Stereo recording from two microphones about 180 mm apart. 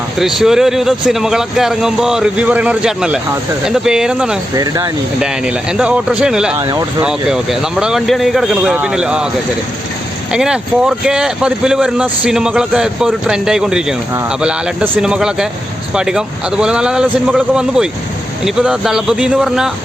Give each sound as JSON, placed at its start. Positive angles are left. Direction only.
{"t": 0.2, "sound": "speech", "side_deg": 0}
{"t": 4.5, "sound": "speech", "side_deg": -20}
{"t": 5.2, "sound": "speech", "side_deg": -5}
{"t": 6.6, "sound": "speech", "side_deg": -20}
{"t": 7.0, "sound": "speech", "side_deg": -5}
{"t": 10.3, "sound": "speech", "side_deg": -5}